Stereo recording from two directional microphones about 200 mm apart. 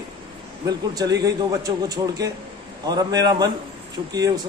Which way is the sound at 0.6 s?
20° right (ahead or behind).